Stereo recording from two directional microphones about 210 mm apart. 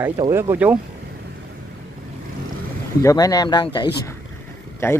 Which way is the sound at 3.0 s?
15° left (ahead or behind).